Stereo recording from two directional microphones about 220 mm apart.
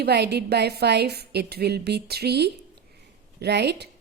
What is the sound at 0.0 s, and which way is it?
A woman's voice, 50° right (ahead or behind).